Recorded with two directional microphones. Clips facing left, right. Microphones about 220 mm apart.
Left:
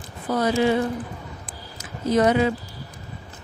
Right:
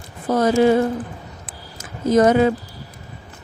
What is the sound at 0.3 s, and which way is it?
Speech, 45° right (ahead or behind).